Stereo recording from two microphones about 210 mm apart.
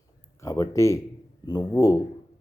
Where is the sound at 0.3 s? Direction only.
15° left (ahead or behind).